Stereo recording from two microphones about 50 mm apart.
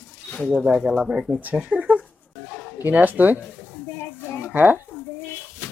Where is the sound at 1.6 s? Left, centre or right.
Right.